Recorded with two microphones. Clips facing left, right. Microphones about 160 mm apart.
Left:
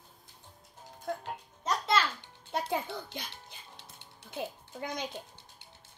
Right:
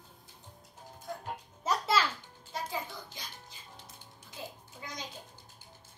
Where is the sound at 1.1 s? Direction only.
65° left (ahead or behind).